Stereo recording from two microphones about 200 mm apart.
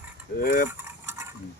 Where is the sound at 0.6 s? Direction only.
15° right (ahead or behind).